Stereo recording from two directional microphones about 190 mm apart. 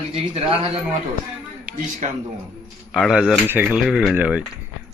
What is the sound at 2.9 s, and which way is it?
Speech, centre (ahead or behind).